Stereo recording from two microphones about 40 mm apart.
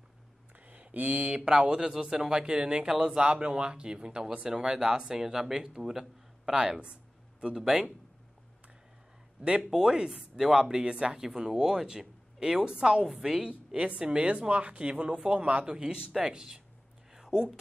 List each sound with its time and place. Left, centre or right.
0.7 s speech: right; by 6.8 s centre
6.8 s a sound: right
7.5 s speech: centre
9.7 s speech: centre
13.0 s speech: centre
13.7 s speech: right
17.1 s a sound: centre